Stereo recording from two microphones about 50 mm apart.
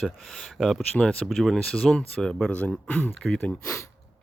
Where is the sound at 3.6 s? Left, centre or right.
Left.